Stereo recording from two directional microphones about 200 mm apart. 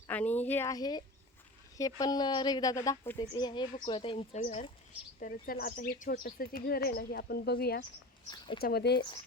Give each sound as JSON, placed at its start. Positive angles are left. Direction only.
{"t": 0.1, "sound": "a woman's voice", "side_deg": 10}
{"t": 5.2, "sound": "speech", "side_deg": 45}
{"t": 8.3, "sound": "a woman's voice", "side_deg": 25}
{"t": 8.6, "sound": "speech", "side_deg": 55}